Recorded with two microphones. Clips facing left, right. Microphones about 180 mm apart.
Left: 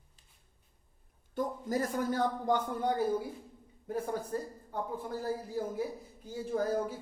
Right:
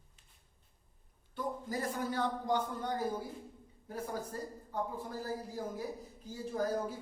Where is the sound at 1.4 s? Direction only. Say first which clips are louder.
Left 5 dB; 45° left (ahead or behind).